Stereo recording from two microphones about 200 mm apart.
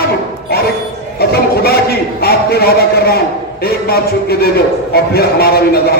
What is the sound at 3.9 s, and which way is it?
A man's voice, 50° left (ahead or behind).